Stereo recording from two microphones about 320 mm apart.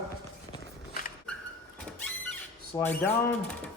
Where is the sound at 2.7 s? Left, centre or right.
Centre.